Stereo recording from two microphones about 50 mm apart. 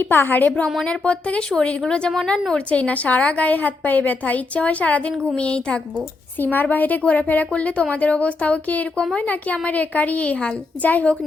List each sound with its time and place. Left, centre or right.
0.1 s a woman's voice: left
0.9 s a woman's voice: left
6.4 s a woman's voice: left